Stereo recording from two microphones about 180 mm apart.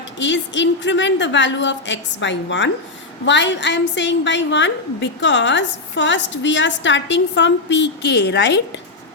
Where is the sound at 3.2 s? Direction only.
80° left.